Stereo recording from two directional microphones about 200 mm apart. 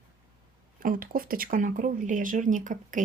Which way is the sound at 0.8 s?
45° right (ahead or behind).